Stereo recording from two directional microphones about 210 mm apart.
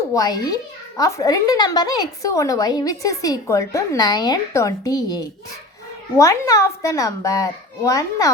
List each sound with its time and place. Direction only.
0.1 s a child's voice: 20° left (ahead or behind)